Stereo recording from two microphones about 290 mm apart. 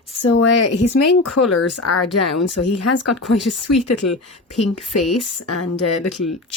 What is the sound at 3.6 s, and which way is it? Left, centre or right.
Speech, left.